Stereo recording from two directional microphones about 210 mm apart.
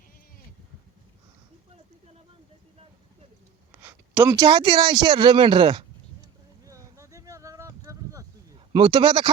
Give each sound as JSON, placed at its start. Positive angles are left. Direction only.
{"t": 3.7, "sound": "speech", "side_deg": -10}
{"t": 6.7, "sound": "a sound", "side_deg": -15}
{"t": 8.7, "sound": "speech", "side_deg": -20}